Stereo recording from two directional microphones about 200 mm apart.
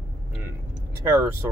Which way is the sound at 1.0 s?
15° right (ahead or behind).